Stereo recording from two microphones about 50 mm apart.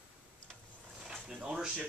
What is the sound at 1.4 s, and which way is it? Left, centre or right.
Speech, centre.